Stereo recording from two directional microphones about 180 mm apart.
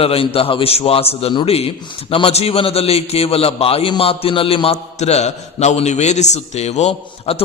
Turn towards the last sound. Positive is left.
turn(degrees=35)  # may be behind; listen again after turning